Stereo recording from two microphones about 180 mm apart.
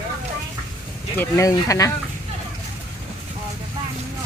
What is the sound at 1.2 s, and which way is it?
Speech, 15° left (ahead or behind).